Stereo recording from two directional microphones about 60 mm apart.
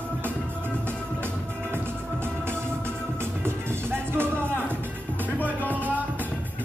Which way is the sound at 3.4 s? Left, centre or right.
Right.